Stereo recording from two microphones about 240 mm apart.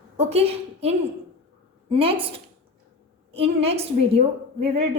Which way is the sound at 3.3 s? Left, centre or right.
Right.